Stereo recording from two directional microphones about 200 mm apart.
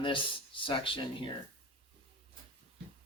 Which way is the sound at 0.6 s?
25° left (ahead or behind).